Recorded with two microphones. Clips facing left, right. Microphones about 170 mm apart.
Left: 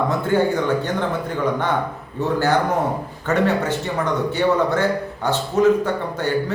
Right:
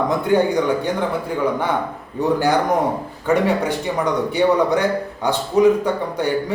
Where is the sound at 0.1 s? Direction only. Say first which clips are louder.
Right 2 dB; 15° right (ahead or behind).